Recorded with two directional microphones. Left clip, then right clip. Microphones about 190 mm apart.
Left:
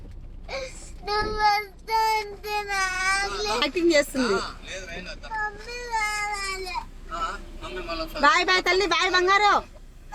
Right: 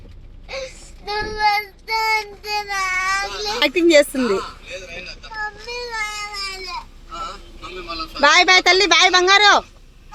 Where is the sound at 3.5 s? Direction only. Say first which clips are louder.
Right 8 dB; 25° right (ahead or behind).